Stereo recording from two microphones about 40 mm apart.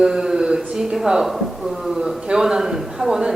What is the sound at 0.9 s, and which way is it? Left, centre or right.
A man's voice, centre.